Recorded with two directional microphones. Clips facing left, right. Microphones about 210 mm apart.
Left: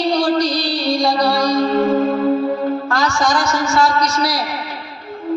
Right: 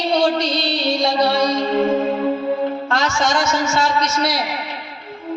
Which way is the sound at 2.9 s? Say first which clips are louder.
Left 2 dB; 25° right (ahead or behind).